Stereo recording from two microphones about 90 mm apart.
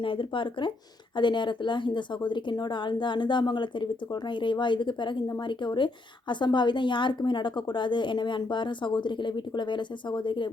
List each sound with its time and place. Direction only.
0.0 s a woman's voice: 70° left (ahead or behind)